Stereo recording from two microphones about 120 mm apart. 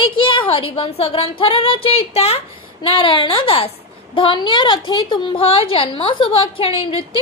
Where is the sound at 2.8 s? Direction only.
45° left (ahead or behind).